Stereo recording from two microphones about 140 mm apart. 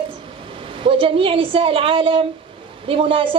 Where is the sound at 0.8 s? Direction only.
40° right (ahead or behind).